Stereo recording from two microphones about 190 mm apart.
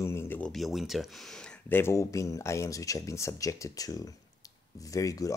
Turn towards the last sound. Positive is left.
turn(degrees=15)  # may be behind; listen again after turning